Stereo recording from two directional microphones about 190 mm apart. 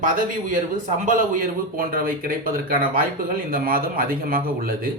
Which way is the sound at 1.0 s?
45° right (ahead or behind).